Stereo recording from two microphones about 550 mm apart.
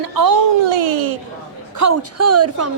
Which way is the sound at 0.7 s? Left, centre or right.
Right.